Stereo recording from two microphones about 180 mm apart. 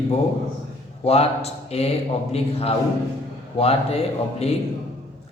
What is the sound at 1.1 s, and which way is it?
A man's voice, 35° left (ahead or behind).